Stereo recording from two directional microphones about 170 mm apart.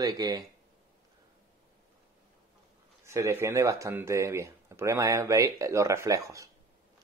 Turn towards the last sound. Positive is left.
turn(degrees=-20)  # may be behind; listen again after turning